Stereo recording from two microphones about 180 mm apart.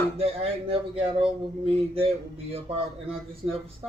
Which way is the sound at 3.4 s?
25° right (ahead or behind).